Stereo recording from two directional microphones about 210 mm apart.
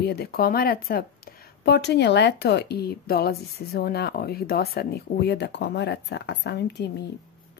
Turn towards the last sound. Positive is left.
turn(degrees=55)  # may be behind; listen again after turning